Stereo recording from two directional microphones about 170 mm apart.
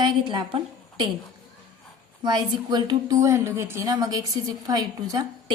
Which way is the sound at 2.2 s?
25° right (ahead or behind).